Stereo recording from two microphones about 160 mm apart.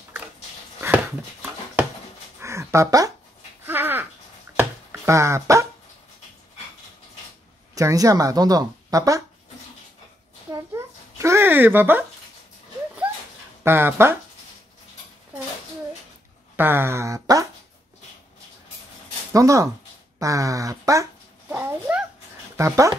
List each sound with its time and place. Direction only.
0.7 s dog: 10° right (ahead or behind)
2.4 s a sound: 15° right (ahead or behind)
4.6 s chopping: 15° right (ahead or behind)
7.7 s speech: 20° right (ahead or behind)
10.5 s a sound: 20° right (ahead or behind)
13.7 s speech: 15° right (ahead or behind)
16.5 s speech: 15° right (ahead or behind)
19.3 s speech: 20° right (ahead or behind)
20.2 s a sound: 20° right (ahead or behind)
22.6 s speech: 20° right (ahead or behind)